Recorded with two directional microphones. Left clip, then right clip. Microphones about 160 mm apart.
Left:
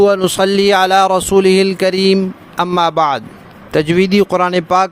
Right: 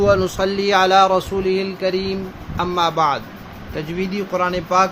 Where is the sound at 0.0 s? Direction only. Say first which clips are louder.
Left 5 dB; 65° left (ahead or behind).